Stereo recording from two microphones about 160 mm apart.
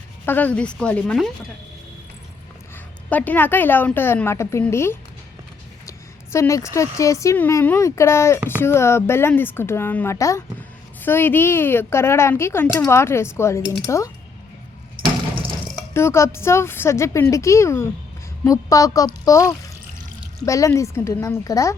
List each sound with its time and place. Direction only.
0.3 s speech: 10° left (ahead or behind)
3.1 s speech: 10° left (ahead or behind)
6.3 s speech: 20° left (ahead or behind)
15.9 s speech: 15° left (ahead or behind)